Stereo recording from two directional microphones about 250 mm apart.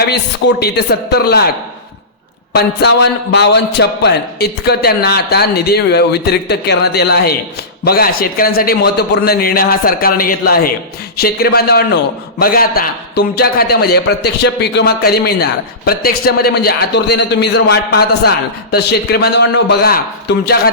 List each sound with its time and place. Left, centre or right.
0.1 s a man's voice: left
2.5 s a man's voice: left